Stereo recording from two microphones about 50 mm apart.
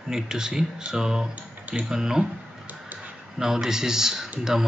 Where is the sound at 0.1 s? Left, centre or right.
Centre.